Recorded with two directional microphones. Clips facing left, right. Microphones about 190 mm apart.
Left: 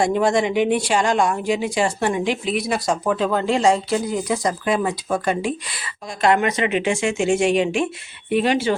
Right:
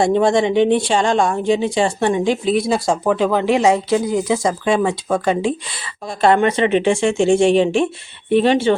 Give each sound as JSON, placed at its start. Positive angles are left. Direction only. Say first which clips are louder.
{"t": 0.0, "sound": "speech", "louder": "right 4 dB", "side_deg": -25}